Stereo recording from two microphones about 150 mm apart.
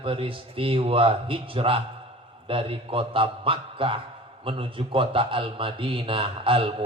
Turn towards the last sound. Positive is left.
turn(degrees=-35)  # may be behind; listen again after turning